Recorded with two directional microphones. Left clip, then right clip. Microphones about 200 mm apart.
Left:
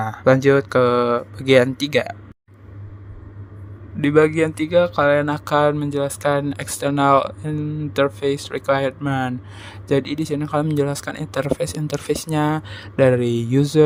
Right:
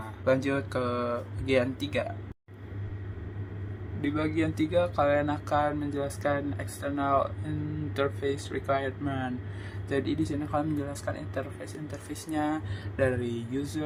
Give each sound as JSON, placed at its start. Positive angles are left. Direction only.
{"t": 0.0, "sound": "speech", "side_deg": 40}
{"t": 4.0, "sound": "speech", "side_deg": 45}